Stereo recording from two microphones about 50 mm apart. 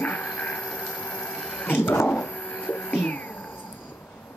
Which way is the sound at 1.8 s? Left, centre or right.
Left.